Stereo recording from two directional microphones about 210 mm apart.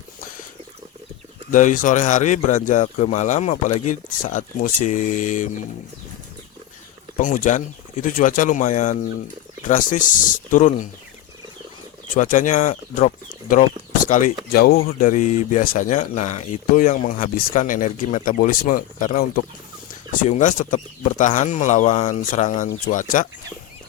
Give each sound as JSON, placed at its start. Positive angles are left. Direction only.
{"t": 1.5, "sound": "speech", "side_deg": 40}
{"t": 7.2, "sound": "speech", "side_deg": 35}
{"t": 12.1, "sound": "speech", "side_deg": 40}
{"t": 14.1, "sound": "speech", "side_deg": 35}
{"t": 20.2, "sound": "speech", "side_deg": 35}